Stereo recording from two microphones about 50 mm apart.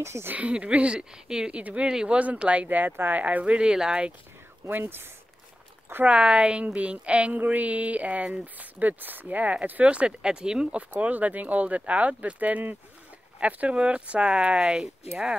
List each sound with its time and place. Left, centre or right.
0.0 s speech: right
0.3 s speech: right
1.9 s speech: centre
2.1 s speech: right
4.6 s speech: right
6.0 s speech: centre
11.0 s speech: right